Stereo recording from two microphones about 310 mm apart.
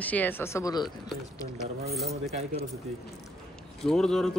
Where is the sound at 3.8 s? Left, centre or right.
Centre.